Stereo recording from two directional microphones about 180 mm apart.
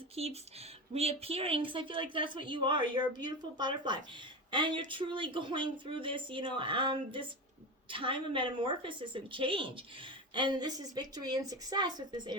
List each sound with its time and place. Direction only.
0.2 s a woman's voice: 35° right (ahead or behind)